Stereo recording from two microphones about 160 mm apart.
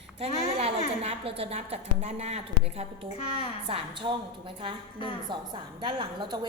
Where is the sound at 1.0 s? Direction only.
35° right (ahead or behind).